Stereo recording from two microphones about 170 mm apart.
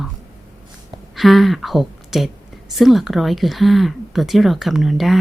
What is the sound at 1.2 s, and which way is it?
Speech, centre (ahead or behind).